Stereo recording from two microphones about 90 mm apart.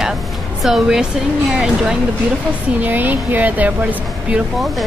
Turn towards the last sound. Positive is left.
turn(degrees=-15)  # may be behind; listen again after turning